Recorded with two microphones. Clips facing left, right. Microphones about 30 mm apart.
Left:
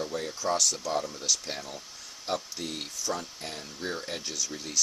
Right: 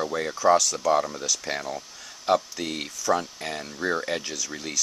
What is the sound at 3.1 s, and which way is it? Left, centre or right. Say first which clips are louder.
Speech: right 10 dB; right.